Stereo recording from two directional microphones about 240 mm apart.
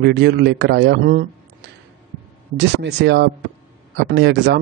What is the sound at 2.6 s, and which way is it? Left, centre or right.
Speech, right.